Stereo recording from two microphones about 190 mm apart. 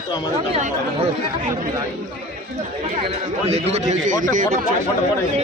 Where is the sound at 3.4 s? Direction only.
35° right (ahead or behind).